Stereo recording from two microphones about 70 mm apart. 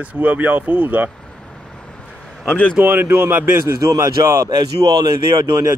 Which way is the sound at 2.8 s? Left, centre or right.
Right.